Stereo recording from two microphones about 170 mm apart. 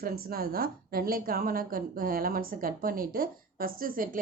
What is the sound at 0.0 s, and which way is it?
A woman's voice, 60° right (ahead or behind).